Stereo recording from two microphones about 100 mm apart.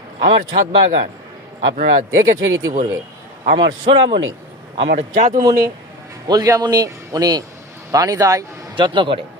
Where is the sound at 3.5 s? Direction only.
60° right (ahead or behind).